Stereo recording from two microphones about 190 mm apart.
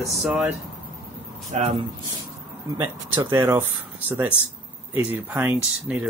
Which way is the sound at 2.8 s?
15° right (ahead or behind).